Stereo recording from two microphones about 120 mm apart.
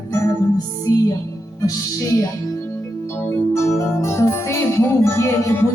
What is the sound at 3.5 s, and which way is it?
Music, 25° left (ahead or behind).